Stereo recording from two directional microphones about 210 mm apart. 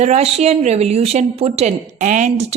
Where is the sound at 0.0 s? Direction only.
30° right (ahead or behind).